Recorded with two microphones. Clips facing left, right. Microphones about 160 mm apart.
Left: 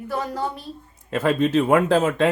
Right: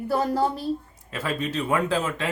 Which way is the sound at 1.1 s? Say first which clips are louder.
Left 9 dB; 55° left (ahead or behind).